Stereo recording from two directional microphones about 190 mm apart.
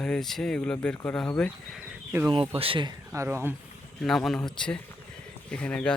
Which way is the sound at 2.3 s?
30° right (ahead or behind).